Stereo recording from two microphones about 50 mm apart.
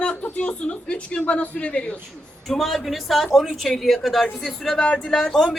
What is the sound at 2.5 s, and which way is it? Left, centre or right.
A man's voice, centre.